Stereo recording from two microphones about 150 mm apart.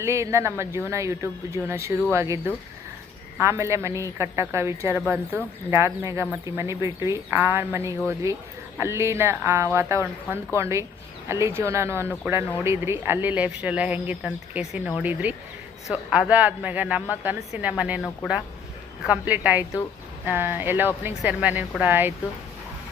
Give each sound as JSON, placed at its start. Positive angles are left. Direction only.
{"t": 0.0, "sound": "a woman's voice", "side_deg": -20}